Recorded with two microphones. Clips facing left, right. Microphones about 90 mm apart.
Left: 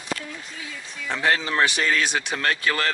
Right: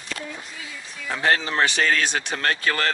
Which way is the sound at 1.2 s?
35° right (ahead or behind).